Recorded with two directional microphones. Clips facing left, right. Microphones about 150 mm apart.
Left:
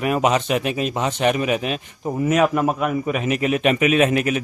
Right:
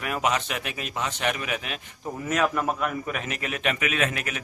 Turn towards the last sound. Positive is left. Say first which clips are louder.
# left 11 dB
turn(degrees=20)  # may be behind; listen again after turning